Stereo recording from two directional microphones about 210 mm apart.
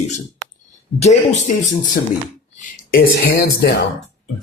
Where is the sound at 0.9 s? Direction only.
30° left (ahead or behind).